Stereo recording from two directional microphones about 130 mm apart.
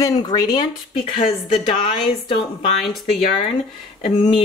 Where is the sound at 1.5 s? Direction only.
45° left (ahead or behind).